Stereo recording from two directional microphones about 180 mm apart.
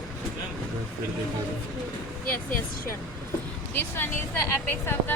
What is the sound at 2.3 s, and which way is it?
Speech, 50° left (ahead or behind).